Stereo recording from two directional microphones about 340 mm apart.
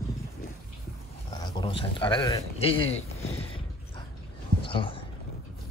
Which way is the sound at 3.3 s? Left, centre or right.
Centre.